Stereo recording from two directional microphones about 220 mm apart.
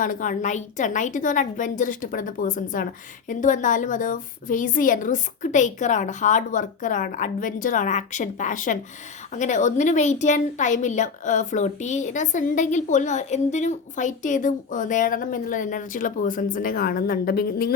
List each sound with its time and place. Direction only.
0.0 s a woman's voice: 35° left (ahead or behind)